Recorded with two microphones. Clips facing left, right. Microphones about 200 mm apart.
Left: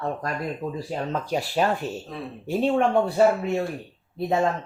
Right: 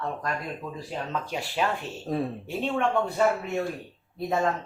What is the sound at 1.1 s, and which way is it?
Speech, 40° left (ahead or behind).